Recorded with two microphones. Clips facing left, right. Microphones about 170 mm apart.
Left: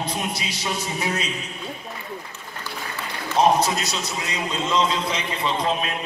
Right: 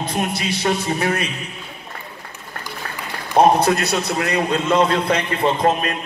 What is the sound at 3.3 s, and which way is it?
A man's voice, 60° right (ahead or behind).